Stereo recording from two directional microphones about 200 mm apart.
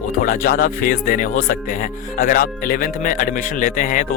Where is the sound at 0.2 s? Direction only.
45° left (ahead or behind).